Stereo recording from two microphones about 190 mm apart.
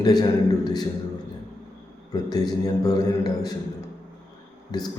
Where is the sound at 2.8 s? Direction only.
20° left (ahead or behind).